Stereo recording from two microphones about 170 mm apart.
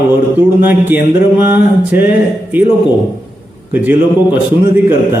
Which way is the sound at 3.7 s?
10° right (ahead or behind).